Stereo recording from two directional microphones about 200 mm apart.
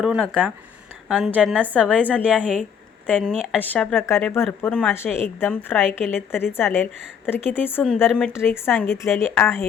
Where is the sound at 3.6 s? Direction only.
10° left (ahead or behind).